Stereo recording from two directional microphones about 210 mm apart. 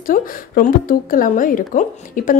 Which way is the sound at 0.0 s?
40° left (ahead or behind).